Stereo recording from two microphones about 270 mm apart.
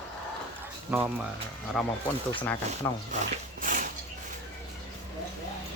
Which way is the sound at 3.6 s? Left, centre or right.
Right.